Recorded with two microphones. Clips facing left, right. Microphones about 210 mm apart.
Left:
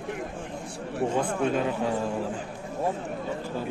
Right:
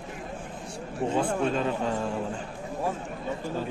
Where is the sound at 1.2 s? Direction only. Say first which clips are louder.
Right 1 dB; 10° left (ahead or behind).